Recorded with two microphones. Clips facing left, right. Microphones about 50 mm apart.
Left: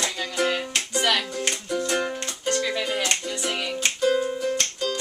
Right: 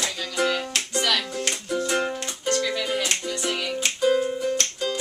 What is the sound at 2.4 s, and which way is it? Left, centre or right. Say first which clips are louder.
Music: even; centre.